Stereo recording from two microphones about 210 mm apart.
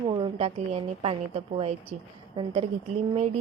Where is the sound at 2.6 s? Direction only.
30° right (ahead or behind).